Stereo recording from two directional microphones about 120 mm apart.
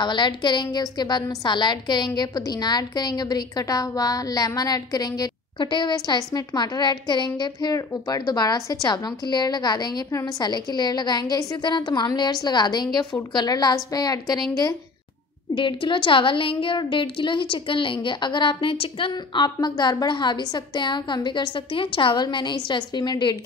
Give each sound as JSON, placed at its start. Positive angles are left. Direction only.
{"t": 0.0, "sound": "a woman's voice", "side_deg": 40}
{"t": 15.5, "sound": "a woman's voice", "side_deg": 45}